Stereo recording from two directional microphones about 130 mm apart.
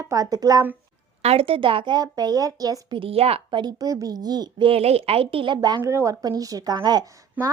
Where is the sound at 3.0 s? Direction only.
50° right (ahead or behind).